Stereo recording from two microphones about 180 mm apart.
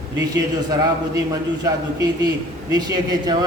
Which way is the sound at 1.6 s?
20° right (ahead or behind).